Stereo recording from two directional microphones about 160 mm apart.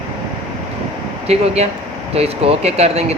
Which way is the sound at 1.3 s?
40° right (ahead or behind).